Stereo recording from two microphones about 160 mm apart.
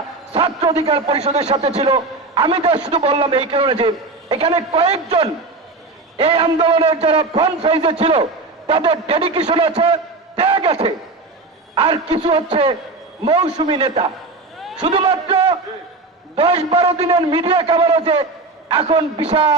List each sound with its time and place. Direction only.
0.3 s a man's voice: 40° right (ahead or behind)
14.8 s a man's voice: 45° right (ahead or behind)